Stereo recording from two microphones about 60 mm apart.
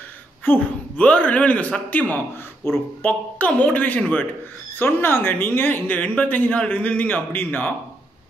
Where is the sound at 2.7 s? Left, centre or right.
Left.